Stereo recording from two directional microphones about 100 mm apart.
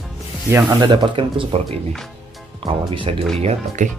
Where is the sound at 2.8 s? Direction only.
60° right (ahead or behind).